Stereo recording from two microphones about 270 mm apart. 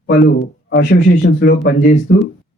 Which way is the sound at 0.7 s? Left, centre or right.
Left.